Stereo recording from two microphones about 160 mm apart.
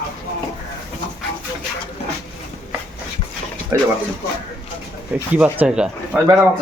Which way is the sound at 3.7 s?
15° right (ahead or behind).